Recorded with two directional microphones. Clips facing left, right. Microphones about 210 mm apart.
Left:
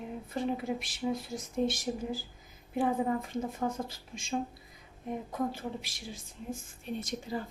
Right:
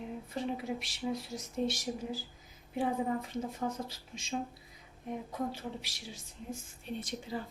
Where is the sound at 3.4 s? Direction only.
50° left (ahead or behind).